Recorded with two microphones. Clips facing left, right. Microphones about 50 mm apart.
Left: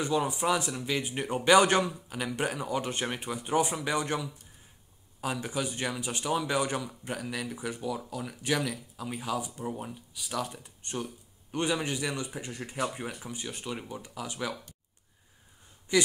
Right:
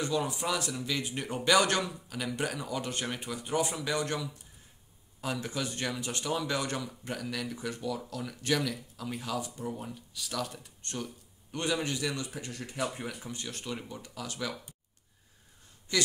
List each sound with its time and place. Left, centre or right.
0.0 s speech: left
15.9 s speech: centre